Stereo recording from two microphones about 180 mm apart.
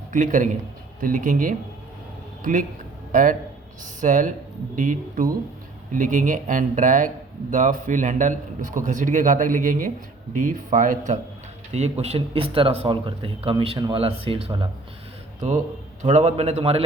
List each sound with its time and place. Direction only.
0.1 s a man's voice: 45° right (ahead or behind); by 14.7 s 30° right (ahead or behind)
15.4 s a man's voice: 45° right (ahead or behind)